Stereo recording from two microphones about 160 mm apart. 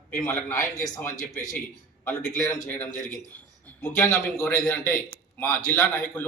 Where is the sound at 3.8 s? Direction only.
15° left (ahead or behind).